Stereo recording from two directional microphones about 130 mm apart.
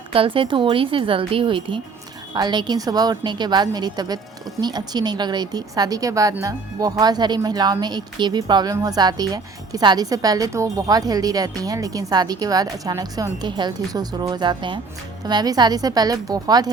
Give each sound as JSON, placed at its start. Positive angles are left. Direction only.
{"t": 0.1, "sound": "a woman's voice", "side_deg": -45}